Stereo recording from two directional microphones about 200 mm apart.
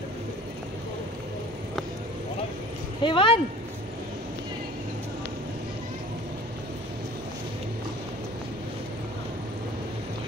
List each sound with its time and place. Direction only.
3.0 s speech: 25° left (ahead or behind)